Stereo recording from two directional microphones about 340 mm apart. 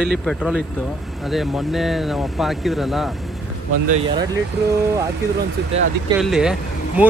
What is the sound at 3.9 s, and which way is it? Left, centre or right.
Speech, centre.